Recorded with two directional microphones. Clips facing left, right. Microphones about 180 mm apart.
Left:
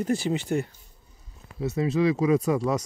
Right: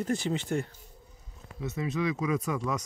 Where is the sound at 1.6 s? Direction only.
35° left (ahead or behind).